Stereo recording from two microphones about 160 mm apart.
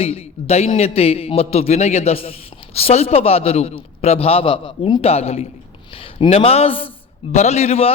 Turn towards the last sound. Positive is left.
turn(degrees=40)  # may be behind; listen again after turning